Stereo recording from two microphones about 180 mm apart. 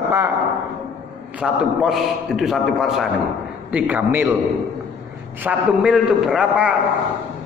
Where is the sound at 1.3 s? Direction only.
5° right (ahead or behind).